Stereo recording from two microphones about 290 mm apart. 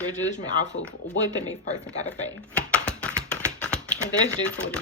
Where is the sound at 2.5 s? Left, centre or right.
Centre.